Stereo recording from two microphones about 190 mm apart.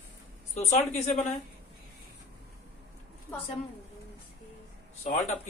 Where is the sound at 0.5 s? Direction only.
40° left (ahead or behind).